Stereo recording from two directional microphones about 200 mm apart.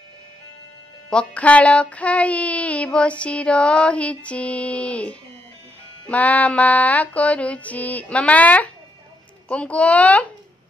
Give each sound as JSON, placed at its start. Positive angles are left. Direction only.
{"t": 1.1, "sound": "female singing", "side_deg": 5}